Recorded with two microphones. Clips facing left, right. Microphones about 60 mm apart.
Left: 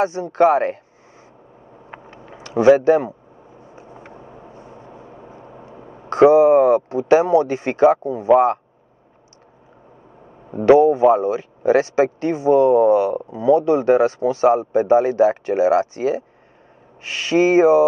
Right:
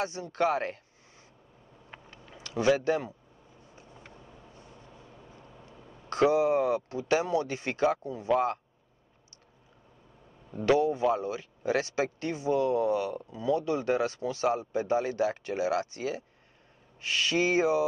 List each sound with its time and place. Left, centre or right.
0.0 s speech: left
1.9 s a sound: left
10.4 s speech: left